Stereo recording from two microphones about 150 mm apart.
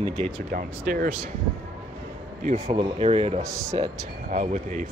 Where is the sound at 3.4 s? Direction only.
20° right (ahead or behind).